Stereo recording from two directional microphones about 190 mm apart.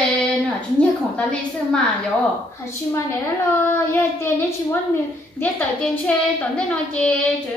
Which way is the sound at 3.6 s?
10° left (ahead or behind).